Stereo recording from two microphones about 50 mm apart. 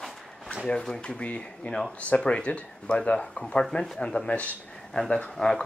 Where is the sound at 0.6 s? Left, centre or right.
Centre.